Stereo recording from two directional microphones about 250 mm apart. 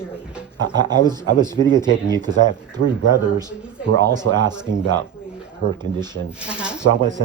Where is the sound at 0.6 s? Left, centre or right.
Centre.